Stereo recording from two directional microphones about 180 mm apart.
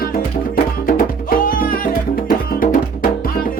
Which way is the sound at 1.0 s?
55° left (ahead or behind).